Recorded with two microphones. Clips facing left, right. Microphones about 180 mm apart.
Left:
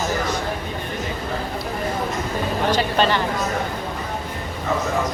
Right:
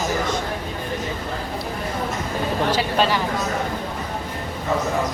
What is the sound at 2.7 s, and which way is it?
Speech, 5° right (ahead or behind).